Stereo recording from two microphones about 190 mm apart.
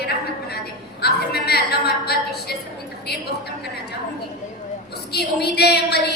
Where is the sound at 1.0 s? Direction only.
55° left (ahead or behind).